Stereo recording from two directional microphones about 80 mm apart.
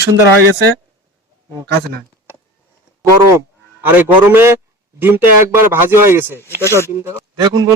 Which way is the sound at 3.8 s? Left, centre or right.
Right.